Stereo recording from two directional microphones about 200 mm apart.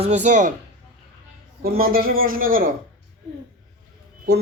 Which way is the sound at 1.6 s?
45° right (ahead or behind).